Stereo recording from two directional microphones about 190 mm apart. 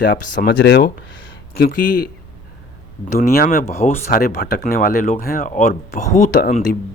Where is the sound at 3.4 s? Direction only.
55° left (ahead or behind).